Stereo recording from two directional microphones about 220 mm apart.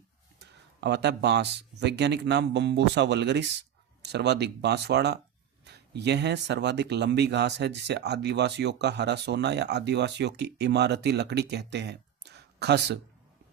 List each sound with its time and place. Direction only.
0.3 s speech: 50° right (ahead or behind)